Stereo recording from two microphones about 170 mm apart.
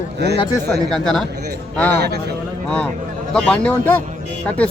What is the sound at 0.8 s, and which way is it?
Speech, centre (ahead or behind).